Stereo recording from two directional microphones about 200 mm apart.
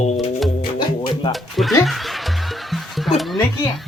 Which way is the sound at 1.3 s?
Centre (ahead or behind).